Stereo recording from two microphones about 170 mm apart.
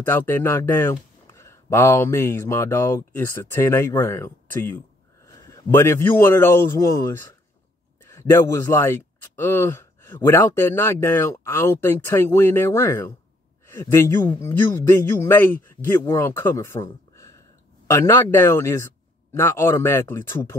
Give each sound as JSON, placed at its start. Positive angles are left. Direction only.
{"t": 0.0, "sound": "speech", "side_deg": 10}